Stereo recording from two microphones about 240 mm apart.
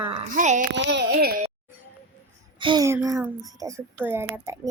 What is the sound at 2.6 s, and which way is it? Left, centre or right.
Speech, centre.